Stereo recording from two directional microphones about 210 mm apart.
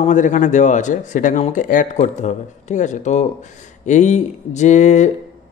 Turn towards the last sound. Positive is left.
turn(degrees=35)  # may be behind; listen again after turning